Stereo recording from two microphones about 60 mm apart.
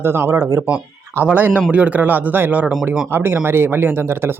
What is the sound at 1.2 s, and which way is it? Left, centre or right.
Speech, right.